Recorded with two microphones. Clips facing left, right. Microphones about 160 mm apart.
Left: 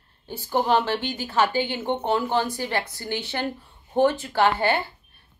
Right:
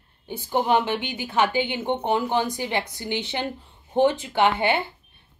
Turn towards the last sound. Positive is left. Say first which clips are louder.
# even
turn(degrees=-20)  # may be behind; listen again after turning